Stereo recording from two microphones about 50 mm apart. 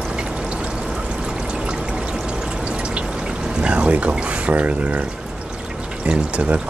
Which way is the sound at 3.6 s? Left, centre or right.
Right.